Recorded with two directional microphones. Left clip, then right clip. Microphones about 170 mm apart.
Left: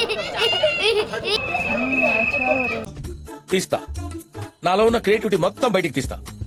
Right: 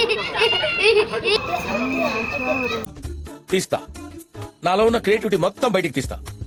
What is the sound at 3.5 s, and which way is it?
A man's voice, centre (ahead or behind).